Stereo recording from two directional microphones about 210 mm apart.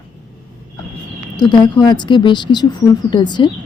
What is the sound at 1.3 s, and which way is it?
Speech, 20° left (ahead or behind).